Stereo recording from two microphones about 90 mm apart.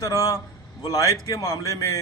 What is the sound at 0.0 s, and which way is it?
A man's voice, 40° left (ahead or behind).